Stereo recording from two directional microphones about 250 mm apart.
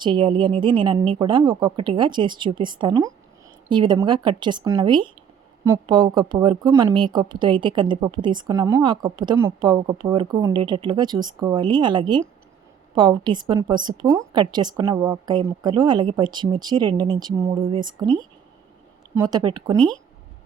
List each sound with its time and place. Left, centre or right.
0.0 s a woman's voice: centre